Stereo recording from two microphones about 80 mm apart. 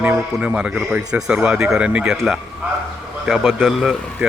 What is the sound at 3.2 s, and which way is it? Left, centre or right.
Speech, centre.